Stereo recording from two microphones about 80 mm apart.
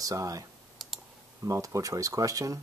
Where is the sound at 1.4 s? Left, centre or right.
Right.